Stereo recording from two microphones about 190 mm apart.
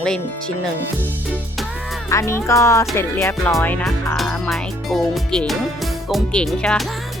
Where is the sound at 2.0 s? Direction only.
15° left (ahead or behind).